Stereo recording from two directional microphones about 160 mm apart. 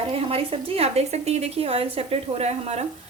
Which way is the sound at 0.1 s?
35° right (ahead or behind).